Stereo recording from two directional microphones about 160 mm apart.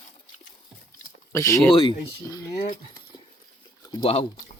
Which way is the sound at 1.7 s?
35° left (ahead or behind).